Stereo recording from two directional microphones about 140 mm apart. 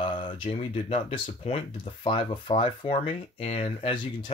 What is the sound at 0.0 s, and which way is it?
Speech, 35° left (ahead or behind).